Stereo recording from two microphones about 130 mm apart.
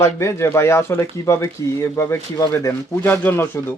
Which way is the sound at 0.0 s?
20° left (ahead or behind).